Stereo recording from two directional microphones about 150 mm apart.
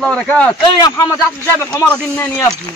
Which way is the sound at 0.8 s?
25° left (ahead or behind).